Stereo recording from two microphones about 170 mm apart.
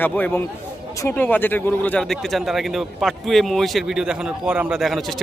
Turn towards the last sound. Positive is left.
turn(degrees=0)  # may be behind; listen again after turning